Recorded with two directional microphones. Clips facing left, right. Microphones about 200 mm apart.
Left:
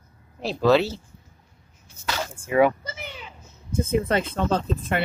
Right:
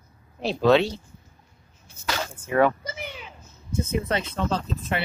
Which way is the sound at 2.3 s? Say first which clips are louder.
Left 2 dB; 10° left (ahead or behind).